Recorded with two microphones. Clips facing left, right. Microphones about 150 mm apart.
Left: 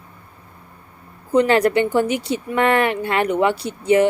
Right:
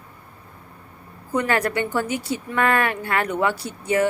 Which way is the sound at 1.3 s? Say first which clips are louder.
Left 7 dB; 25° left (ahead or behind).